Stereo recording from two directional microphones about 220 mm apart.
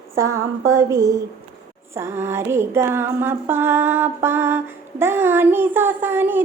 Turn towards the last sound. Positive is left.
turn(degrees=-10)  # may be behind; listen again after turning